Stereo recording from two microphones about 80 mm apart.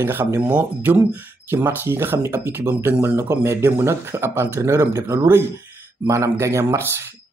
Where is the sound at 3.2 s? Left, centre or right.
Right.